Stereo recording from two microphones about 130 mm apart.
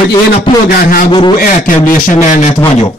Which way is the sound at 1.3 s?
90° left.